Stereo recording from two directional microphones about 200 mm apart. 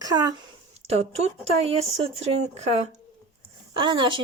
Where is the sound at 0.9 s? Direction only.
30° right (ahead or behind).